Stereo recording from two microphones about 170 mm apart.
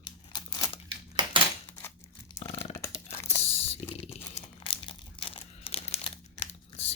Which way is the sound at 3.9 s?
35° left (ahead or behind).